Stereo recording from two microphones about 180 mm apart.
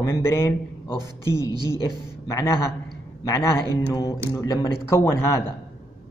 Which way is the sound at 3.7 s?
15° left (ahead or behind).